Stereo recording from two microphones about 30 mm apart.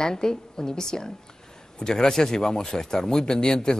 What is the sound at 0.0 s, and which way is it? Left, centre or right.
Speech, left.